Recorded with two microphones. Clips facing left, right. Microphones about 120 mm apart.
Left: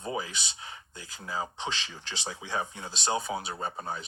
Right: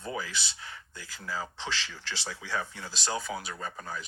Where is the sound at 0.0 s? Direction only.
20° left (ahead or behind).